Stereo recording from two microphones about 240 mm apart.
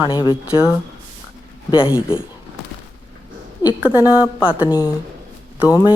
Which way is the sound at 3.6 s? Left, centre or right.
Centre.